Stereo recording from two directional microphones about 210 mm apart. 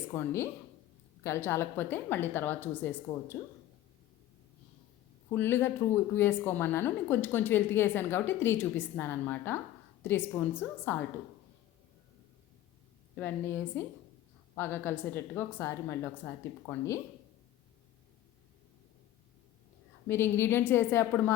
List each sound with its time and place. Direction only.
0.1 s a woman's voice: 10° left (ahead or behind)
5.3 s a woman's voice: 10° left (ahead or behind)
13.1 s a woman's voice: 10° left (ahead or behind)
20.1 s a woman's voice: 10° left (ahead or behind)